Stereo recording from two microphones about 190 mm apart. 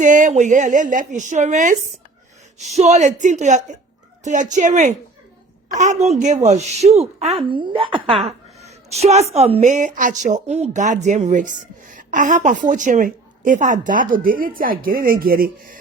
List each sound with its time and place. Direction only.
0.0 s a woman's voice: 40° right (ahead or behind)